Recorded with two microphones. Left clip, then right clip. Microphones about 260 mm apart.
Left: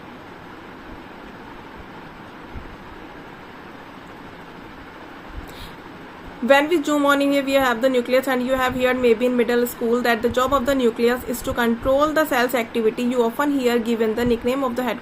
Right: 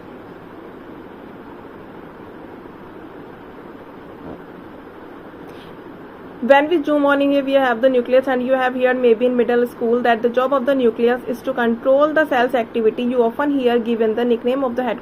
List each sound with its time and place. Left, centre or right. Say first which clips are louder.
6.5 s speech: right 3 dB; centre